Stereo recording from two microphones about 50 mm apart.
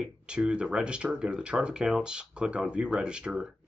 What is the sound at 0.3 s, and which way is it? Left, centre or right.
Speech, centre.